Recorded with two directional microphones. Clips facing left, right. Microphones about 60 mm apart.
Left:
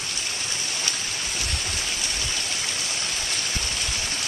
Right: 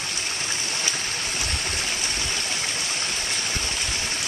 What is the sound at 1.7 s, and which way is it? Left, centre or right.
Stream, right.